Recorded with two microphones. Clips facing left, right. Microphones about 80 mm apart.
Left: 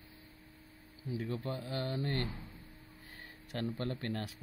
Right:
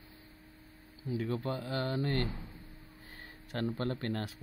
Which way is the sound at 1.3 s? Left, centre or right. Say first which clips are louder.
Right 3 dB; right.